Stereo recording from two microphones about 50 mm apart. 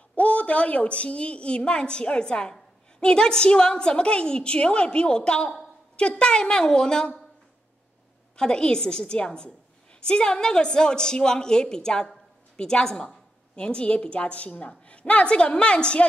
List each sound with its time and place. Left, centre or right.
0.1 s a woman's voice: left
8.4 s a woman's voice: centre